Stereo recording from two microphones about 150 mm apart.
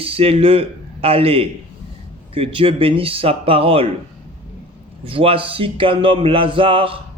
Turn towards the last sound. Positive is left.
turn(degrees=-35)  # may be behind; listen again after turning